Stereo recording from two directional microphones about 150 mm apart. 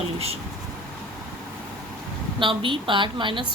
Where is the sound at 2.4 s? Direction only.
35° right (ahead or behind).